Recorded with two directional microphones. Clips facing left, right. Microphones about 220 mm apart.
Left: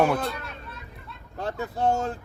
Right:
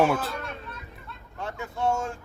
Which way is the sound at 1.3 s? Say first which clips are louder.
Left 4 dB; 35° left (ahead or behind).